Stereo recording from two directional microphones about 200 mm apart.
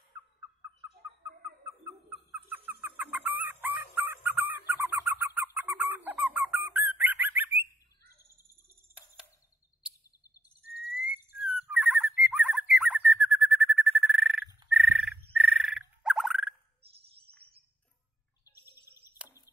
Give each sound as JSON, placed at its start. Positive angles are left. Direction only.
{"t": 1.6, "sound": "chicken", "side_deg": -10}
{"t": 9.2, "sound": "a sound", "side_deg": -5}
{"t": 10.9, "sound": "whistle", "side_deg": 50}
{"t": 11.4, "sound": "bird", "side_deg": 0}
{"t": 15.3, "sound": "frog", "side_deg": 0}
{"t": 18.9, "sound": "a sound", "side_deg": -10}